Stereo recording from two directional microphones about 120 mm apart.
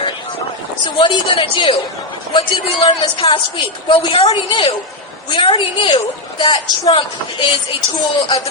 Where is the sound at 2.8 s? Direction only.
45° left (ahead or behind).